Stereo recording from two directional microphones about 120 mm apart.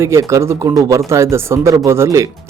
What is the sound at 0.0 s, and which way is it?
Speech, 25° right (ahead or behind).